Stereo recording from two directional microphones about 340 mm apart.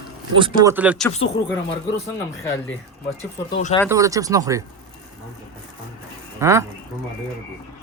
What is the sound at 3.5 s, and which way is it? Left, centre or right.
Speech, left.